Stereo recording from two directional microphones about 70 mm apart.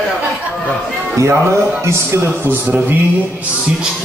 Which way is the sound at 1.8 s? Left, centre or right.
Right.